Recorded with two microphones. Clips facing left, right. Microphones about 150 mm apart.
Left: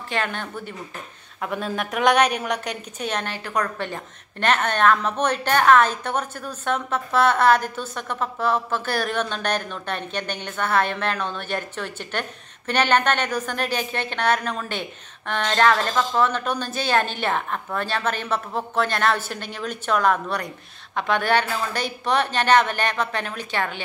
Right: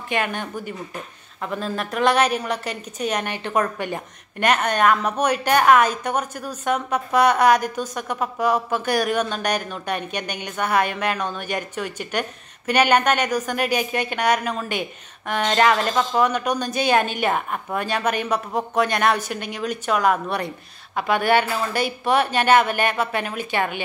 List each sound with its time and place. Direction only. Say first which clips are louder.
0.1 s a woman's voice: right 2 dB; 15° right (ahead or behind)
1.4 s a woman's voice: even; centre (ahead or behind)
3.4 s a woman's voice: right 5 dB; 20° right (ahead or behind)
20.2 s speech: right 2 dB; 25° right (ahead or behind)
20.9 s a woman's voice: right 2 dB; 10° right (ahead or behind)